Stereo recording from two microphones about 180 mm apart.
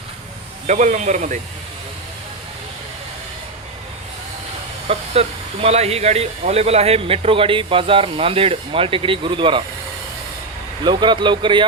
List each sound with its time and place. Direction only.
0.7 s speech: 40° right (ahead or behind)
4.9 s speech: 35° right (ahead or behind)
10.8 s speech: 25° right (ahead or behind)